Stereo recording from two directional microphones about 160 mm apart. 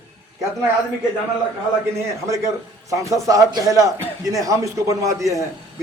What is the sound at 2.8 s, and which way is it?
A man's voice, 20° right (ahead or behind).